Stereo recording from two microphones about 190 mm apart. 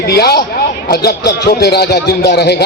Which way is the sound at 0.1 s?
55° left (ahead or behind).